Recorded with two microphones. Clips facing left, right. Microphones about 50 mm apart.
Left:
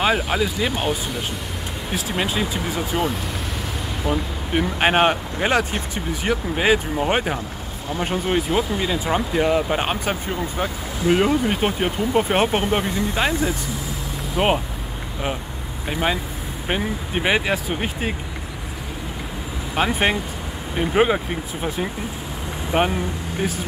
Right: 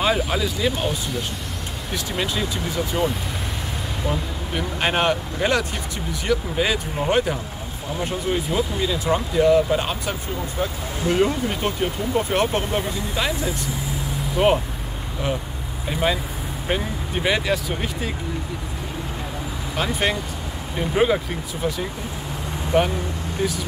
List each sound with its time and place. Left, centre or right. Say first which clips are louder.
0.0 s speech: left 1 dB; centre
2.0 s speech: left 2 dB; centre
4.6 s speech: left 5 dB; left
14.4 s speech: right 1 dB; centre
15.9 s speech: even; centre
19.7 s speech: left 3 dB; left
22.7 s speech: right 1 dB; left